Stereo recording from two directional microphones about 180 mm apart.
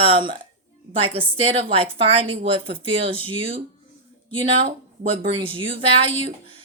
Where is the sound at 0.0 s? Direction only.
25° right (ahead or behind).